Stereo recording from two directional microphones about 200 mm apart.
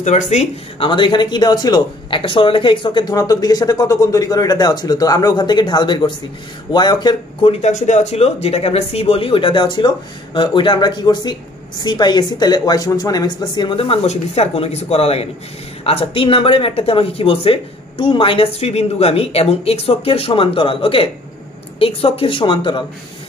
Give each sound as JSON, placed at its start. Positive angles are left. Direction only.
{"t": 0.0, "sound": "speech", "side_deg": 35}
{"t": 7.6, "sound": "speech", "side_deg": 35}